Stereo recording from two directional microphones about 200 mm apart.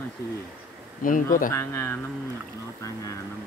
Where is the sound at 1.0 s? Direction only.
45° left (ahead or behind).